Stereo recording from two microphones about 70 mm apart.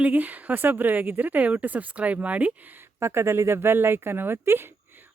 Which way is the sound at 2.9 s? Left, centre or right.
Right.